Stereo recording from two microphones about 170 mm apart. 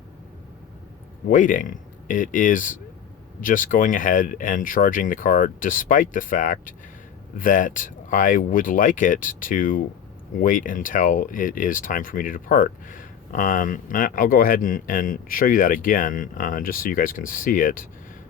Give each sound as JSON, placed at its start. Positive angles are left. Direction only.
{"t": 1.3, "sound": "speech", "side_deg": 50}